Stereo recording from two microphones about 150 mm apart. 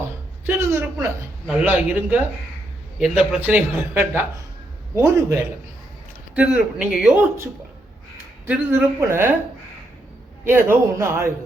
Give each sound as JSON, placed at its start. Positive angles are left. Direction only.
{"t": 0.4, "sound": "a sound", "side_deg": -15}
{"t": 1.5, "sound": "a man's voice", "side_deg": -10}
{"t": 8.4, "sound": "a man's voice", "side_deg": -15}
{"t": 10.4, "sound": "a man's voice", "side_deg": -15}